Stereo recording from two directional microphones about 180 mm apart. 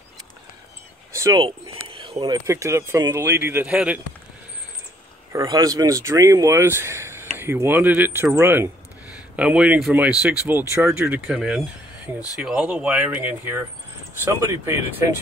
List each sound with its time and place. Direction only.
1.1 s a sound: 15° right (ahead or behind)
1.4 s speech: 30° right (ahead or behind); by 4.0 s 5° right (ahead or behind)
5.3 s speech: 20° right (ahead or behind)